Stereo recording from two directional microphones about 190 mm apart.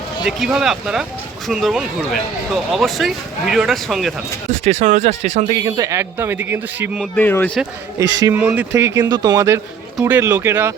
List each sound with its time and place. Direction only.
0.3 s speech: centre (ahead or behind)
4.6 s speech: 40° right (ahead or behind)
5.5 s a man's voice: 20° right (ahead or behind)
7.2 s speech: 10° left (ahead or behind)
8.3 s a man's voice: 10° right (ahead or behind)